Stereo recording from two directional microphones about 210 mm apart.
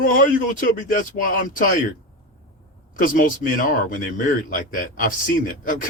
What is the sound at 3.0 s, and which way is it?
Speech, 40° left (ahead or behind).